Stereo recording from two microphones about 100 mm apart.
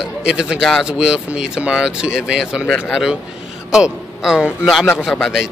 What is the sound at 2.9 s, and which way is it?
A man's voice, 5° right (ahead or behind).